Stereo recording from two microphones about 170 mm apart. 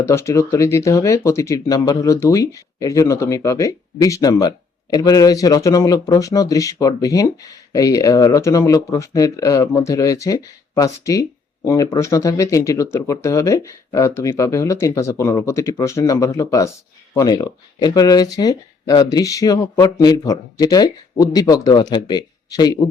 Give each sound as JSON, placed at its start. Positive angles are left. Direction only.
{"t": 0.0, "sound": "speech", "side_deg": 15}